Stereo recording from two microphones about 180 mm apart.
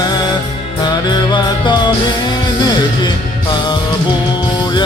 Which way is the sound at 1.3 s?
25° left (ahead or behind).